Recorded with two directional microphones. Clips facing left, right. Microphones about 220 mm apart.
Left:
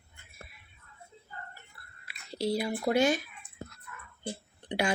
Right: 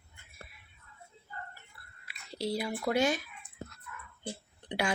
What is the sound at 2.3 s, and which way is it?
Speech, centre (ahead or behind).